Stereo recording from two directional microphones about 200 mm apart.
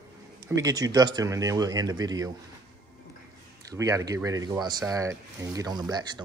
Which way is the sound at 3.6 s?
15° right (ahead or behind).